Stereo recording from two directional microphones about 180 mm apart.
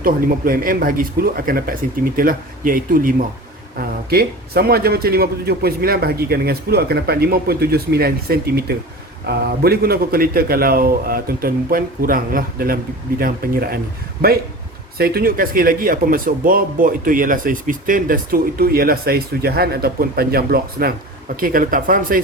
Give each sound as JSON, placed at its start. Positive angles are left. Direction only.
{"t": 0.0, "sound": "a man's voice", "side_deg": -55}
{"t": 14.9, "sound": "speech", "side_deg": -55}